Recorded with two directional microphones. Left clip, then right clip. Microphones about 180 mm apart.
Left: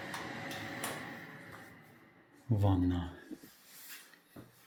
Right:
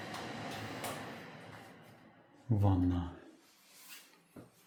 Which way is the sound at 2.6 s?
15° right (ahead or behind).